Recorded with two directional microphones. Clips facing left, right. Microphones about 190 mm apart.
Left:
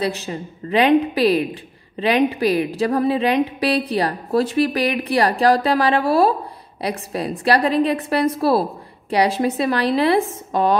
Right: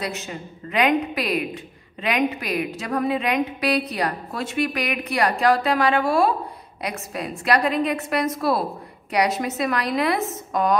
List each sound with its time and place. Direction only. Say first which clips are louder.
0.0 s a woman's voice: left 6 dB; 35° left (ahead or behind)